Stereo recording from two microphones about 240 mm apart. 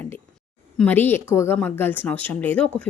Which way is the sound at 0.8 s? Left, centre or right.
Centre.